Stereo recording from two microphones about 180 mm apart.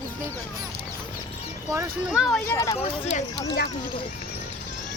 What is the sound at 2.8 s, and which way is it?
Speech, 35° left (ahead or behind).